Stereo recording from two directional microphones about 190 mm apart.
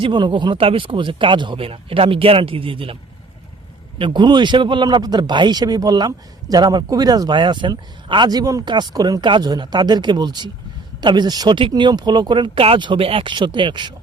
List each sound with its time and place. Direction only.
0.0 s a man's voice: 25° right (ahead or behind)